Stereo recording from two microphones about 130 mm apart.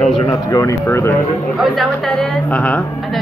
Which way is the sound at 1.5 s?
Centre (ahead or behind).